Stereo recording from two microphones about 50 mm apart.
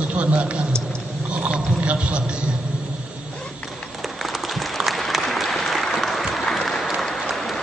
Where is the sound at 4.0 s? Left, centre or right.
Centre.